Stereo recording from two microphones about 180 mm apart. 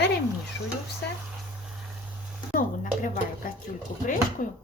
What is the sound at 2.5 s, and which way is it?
A woman's voice, 50° left (ahead or behind).